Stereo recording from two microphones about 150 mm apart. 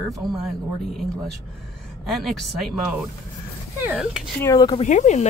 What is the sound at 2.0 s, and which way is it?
Speech, centre (ahead or behind).